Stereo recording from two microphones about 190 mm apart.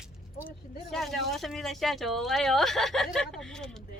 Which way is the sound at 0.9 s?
Centre (ahead or behind).